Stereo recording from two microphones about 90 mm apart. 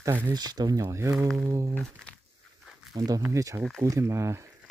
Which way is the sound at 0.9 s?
30° right (ahead or behind).